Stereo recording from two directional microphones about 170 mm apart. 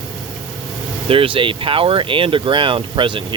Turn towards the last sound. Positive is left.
turn(degrees=-30)  # may be behind; listen again after turning